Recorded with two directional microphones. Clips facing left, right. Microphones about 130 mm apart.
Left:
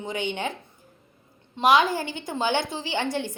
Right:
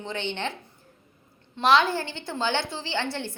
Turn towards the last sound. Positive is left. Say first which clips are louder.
# left 3 dB
turn(degrees=15)  # may be behind; listen again after turning